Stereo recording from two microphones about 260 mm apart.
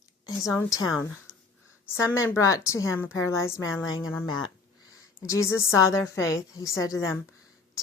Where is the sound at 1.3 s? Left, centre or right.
Left.